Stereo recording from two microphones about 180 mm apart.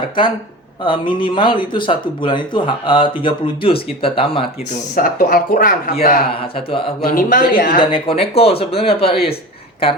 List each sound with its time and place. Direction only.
0.9 s speech: 25° left (ahead or behind)
4.9 s speech: 50° left (ahead or behind)
6.7 s speech: 30° left (ahead or behind)
7.0 s speech: 50° left (ahead or behind)
7.8 s speech: 30° left (ahead or behind)